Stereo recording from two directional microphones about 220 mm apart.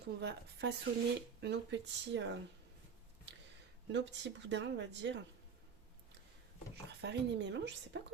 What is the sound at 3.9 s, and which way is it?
A woman's voice, 55° right (ahead or behind).